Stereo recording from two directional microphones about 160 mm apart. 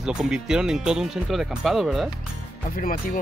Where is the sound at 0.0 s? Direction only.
5° right (ahead or behind).